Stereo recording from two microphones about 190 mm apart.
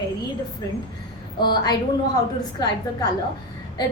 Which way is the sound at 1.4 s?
25° left (ahead or behind).